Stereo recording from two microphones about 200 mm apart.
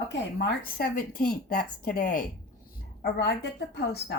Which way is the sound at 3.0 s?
55° left (ahead or behind).